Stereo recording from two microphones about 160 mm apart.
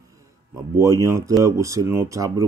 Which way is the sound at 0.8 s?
20° right (ahead or behind).